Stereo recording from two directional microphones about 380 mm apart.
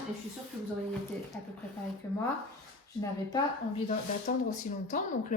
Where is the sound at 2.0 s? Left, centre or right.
Centre.